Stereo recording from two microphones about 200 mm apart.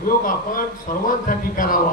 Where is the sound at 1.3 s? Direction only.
45° left (ahead or behind).